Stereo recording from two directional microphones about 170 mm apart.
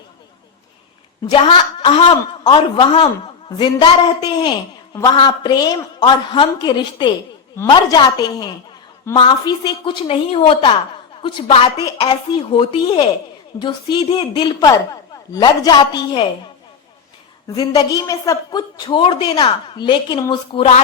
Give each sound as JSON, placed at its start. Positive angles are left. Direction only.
{"t": 1.3, "sound": "a man's voice", "side_deg": 30}
{"t": 17.5, "sound": "a woman's voice", "side_deg": 25}